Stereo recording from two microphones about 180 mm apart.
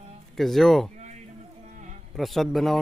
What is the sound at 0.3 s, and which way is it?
Speech, centre (ahead or behind).